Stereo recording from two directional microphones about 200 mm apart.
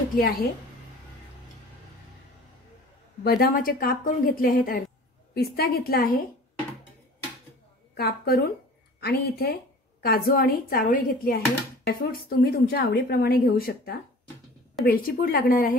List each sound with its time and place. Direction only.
0.1 s a woman's voice: 45° left (ahead or behind)
3.3 s a woman's voice: 45° left (ahead or behind)
7.9 s a woman's voice: 50° left (ahead or behind)